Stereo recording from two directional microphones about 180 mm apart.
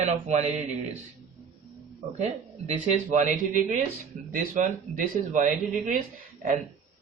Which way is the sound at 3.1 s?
45° right (ahead or behind).